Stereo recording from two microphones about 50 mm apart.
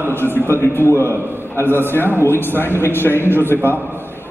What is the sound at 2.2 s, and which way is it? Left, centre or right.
Speech, left.